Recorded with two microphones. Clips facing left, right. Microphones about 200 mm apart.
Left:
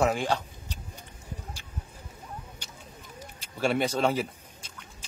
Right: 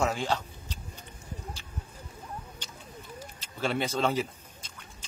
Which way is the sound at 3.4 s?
10° left (ahead or behind).